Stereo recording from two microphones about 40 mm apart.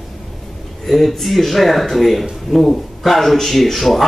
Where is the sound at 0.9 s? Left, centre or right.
Centre.